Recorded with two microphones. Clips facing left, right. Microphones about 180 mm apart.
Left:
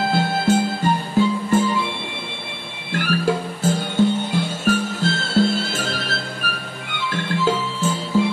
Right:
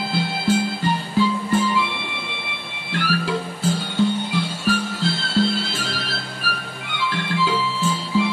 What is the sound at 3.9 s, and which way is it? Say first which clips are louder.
Music: left 2 dB; 45° left (ahead or behind).